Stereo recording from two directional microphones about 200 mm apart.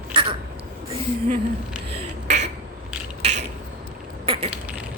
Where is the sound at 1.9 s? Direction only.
35° right (ahead or behind).